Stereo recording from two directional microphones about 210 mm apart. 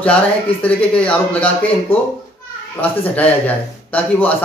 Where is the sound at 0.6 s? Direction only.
5° left (ahead or behind).